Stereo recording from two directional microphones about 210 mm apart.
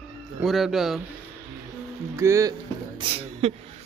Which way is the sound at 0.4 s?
Centre (ahead or behind).